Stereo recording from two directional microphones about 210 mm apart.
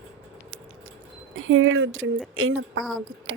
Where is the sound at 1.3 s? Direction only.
75° right (ahead or behind).